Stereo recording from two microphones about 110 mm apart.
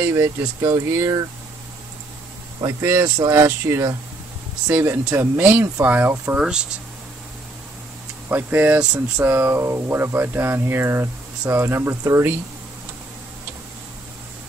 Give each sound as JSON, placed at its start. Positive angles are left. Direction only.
{"t": 0.0, "sound": "speech", "side_deg": -25}
{"t": 2.6, "sound": "speech", "side_deg": -20}
{"t": 8.3, "sound": "speech", "side_deg": -20}